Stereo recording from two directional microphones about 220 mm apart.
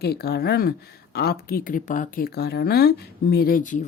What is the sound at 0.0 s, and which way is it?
Speech, 45° left (ahead or behind).